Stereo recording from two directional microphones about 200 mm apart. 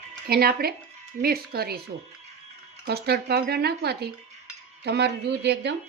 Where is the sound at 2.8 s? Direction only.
55° right (ahead or behind).